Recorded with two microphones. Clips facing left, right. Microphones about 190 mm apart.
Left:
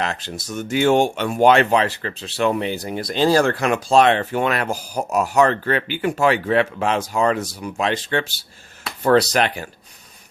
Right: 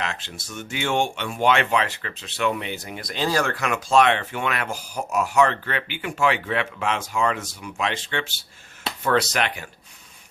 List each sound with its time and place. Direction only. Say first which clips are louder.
0.0 s speech: left 5 dB; 40° left (ahead or behind)